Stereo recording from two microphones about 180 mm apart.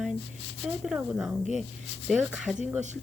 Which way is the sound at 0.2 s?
35° left (ahead or behind).